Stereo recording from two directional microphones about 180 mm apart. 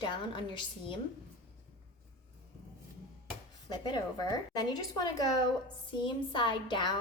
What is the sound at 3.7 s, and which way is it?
A woman's voice, 25° left (ahead or behind).